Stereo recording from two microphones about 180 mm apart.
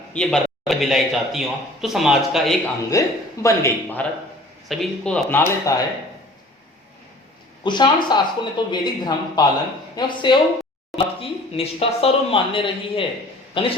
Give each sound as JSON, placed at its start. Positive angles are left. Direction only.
{"t": 0.1, "sound": "a man's voice", "side_deg": 5}
{"t": 2.9, "sound": "speech", "side_deg": 20}
{"t": 4.7, "sound": "speech", "side_deg": 5}
{"t": 7.6, "sound": "a man's voice", "side_deg": 25}